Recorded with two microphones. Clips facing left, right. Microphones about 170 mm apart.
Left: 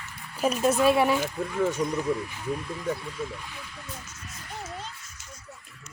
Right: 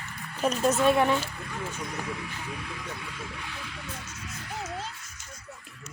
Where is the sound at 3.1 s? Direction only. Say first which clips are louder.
Left 4 dB; 80° right.